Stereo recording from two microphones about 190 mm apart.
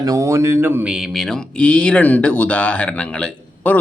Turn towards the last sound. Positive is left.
turn(degrees=5)  # may be behind; listen again after turning